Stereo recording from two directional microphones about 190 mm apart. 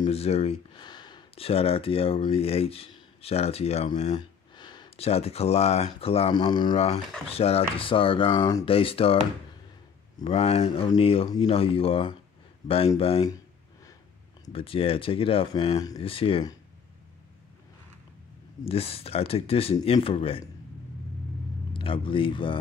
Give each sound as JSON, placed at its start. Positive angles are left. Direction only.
{"t": 0.0, "sound": "speech", "side_deg": 30}
{"t": 4.6, "sound": "speech", "side_deg": 25}
{"t": 10.2, "sound": "speech", "side_deg": 30}
{"t": 14.4, "sound": "speech", "side_deg": 30}
{"t": 18.7, "sound": "speech", "side_deg": 30}
{"t": 21.7, "sound": "speech", "side_deg": 30}